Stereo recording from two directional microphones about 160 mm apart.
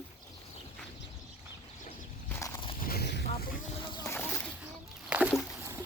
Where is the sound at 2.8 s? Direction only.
70° left (ahead or behind).